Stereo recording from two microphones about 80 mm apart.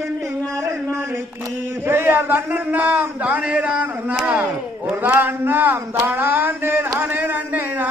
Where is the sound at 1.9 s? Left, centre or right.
Right; by 4.4 s centre.